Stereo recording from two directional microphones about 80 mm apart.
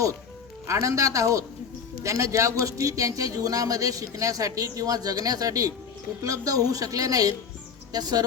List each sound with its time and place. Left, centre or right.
0.7 s a man's voice: right